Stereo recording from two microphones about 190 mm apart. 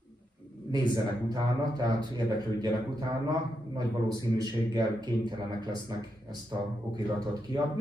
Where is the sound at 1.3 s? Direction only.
20° right (ahead or behind).